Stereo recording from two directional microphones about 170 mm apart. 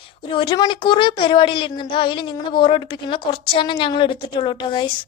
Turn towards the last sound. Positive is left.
turn(degrees=30)  # may be behind; listen again after turning